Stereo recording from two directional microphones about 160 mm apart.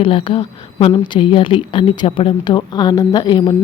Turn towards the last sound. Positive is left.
turn(degrees=30)  # may be behind; listen again after turning